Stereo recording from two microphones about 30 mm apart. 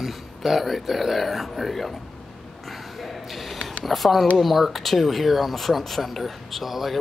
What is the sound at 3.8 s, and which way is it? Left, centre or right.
A man's voice, centre.